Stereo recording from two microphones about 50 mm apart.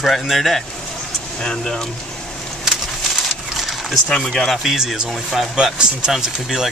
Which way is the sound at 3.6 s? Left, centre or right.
Centre.